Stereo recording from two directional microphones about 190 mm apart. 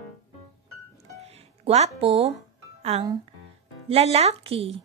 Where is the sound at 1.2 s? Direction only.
35° right (ahead or behind).